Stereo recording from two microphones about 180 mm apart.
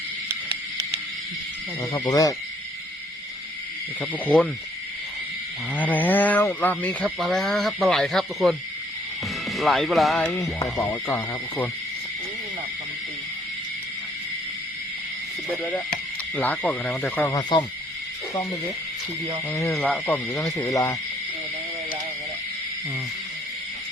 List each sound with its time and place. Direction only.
1.8 s speech: 20° left (ahead or behind)
4.0 s speech: 5° left (ahead or behind)
5.7 s speech: 10° left (ahead or behind)
10.6 s speech: 20° left (ahead or behind)
16.3 s speech: 10° left (ahead or behind)
19.5 s speech: 15° left (ahead or behind)